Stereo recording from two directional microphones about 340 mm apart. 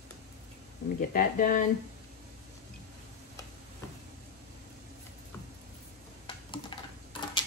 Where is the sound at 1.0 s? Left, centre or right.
Left.